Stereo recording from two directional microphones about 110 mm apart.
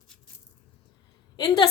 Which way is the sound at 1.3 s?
40° left (ahead or behind).